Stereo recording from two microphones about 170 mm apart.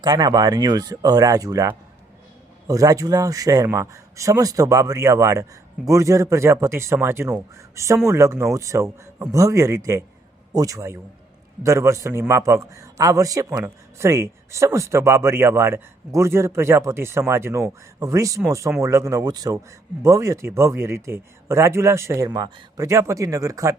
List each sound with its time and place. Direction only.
0.0 s a man's voice: 25° right (ahead or behind)